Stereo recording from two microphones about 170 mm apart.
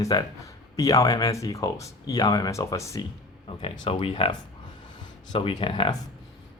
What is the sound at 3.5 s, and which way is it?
Speech, 30° left (ahead or behind).